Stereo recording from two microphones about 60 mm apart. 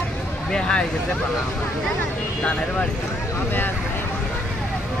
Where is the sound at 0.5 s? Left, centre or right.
Centre.